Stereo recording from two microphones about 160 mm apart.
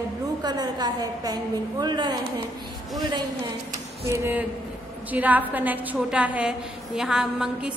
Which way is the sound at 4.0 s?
15° right (ahead or behind).